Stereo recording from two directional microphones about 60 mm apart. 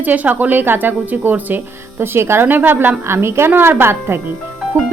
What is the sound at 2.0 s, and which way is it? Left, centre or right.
A woman's voice, right.